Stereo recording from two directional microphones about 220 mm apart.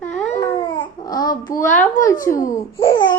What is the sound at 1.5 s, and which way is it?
Speech, 35° left (ahead or behind).